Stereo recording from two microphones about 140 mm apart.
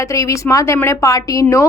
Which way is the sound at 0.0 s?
20° left (ahead or behind).